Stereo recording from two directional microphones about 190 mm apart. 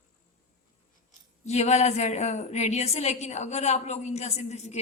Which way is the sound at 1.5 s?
35° left (ahead or behind).